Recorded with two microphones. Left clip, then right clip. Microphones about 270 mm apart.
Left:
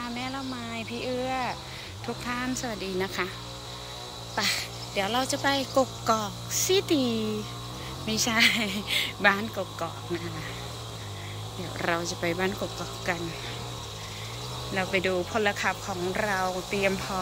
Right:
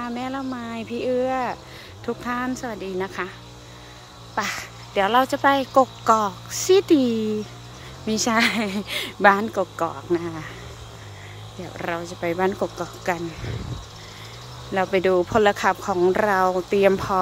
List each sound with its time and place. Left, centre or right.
0.0 s a sound: right
2.0 s speech: right
4.4 s speech: centre
11.8 s speech: centre
14.7 s speech: centre